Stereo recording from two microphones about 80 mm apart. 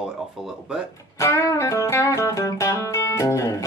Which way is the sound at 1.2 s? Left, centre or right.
Left.